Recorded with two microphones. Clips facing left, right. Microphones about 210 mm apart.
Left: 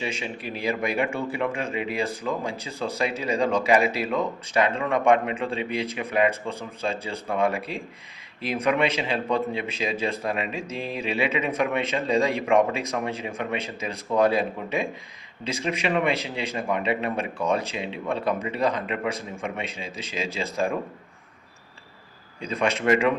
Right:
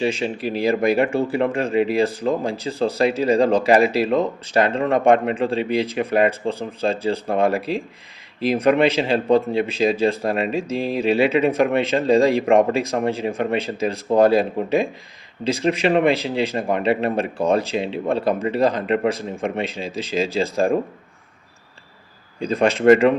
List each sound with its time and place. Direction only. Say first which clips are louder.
0.0 s speech: right 9 dB; 35° right (ahead or behind)
15.6 s speech: right 7 dB; 35° right (ahead or behind)
22.4 s speech: right 7 dB; 35° right (ahead or behind)